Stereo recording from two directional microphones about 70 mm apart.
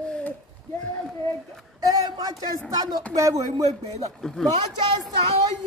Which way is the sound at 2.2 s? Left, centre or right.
Right.